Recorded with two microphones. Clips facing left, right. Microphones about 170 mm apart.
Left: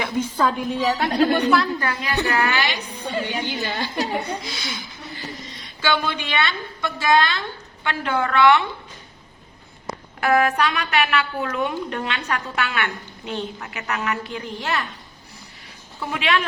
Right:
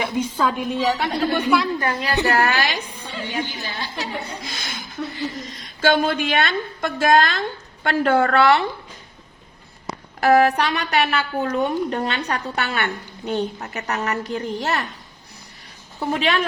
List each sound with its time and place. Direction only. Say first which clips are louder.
0.0 s a woman's voice: even; 5° right (ahead or behind)
1.8 s a woman's voice: right 3 dB; 30° right (ahead or behind)
2.2 s a woman's voice: right 2 dB; 40° right (ahead or behind)
3.5 s a woman's voice: left 5 dB; 60° left (ahead or behind)
4.4 s a woman's voice: left 1 dB; 50° right (ahead or behind)
10.2 s a woman's voice: right 3 dB; 40° right (ahead or behind)
16.0 s a woman's voice: right 2 dB; 40° right (ahead or behind)